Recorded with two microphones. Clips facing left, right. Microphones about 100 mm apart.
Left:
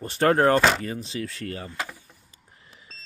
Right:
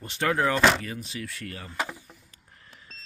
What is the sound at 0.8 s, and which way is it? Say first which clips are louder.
Speech: left 5 dB; 30° left (ahead or behind).